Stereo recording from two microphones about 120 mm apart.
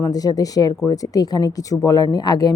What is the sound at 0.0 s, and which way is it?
A woman's voice, 30° left (ahead or behind).